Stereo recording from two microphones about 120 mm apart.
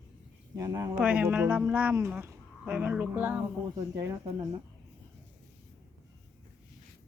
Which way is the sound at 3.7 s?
25° right (ahead or behind).